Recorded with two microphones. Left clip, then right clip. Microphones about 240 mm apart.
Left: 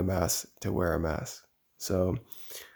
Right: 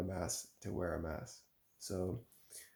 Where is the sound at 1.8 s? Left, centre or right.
Left.